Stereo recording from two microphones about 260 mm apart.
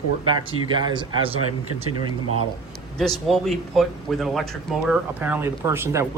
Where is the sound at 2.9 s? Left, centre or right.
Centre.